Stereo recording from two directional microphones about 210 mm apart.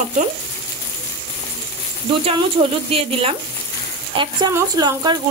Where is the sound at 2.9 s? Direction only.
25° right (ahead or behind).